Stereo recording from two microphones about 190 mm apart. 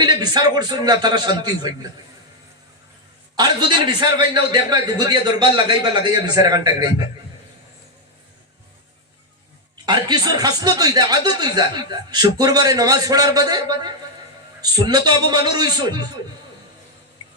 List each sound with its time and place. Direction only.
0.0 s speech: 20° right (ahead or behind)
3.3 s speech: 20° right (ahead or behind)
9.8 s speech: 25° right (ahead or behind)